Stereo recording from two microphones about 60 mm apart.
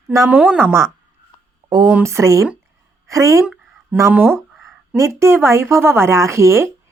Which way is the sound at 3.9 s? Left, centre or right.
Right.